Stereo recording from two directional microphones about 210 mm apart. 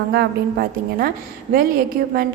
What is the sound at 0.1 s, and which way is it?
A woman's voice, 45° right (ahead or behind).